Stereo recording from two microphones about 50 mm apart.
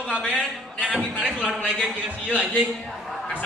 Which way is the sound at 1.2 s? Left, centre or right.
Right.